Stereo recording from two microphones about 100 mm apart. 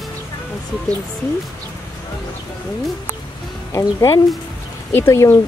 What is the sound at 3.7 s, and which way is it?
Speech, 30° left (ahead or behind).